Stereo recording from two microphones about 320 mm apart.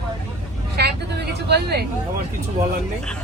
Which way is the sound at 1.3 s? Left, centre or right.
Right.